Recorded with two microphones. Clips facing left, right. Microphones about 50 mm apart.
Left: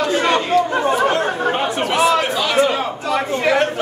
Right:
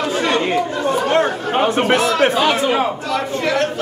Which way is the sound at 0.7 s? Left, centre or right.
Left.